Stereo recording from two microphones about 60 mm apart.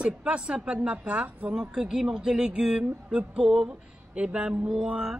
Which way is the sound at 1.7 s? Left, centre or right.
Centre.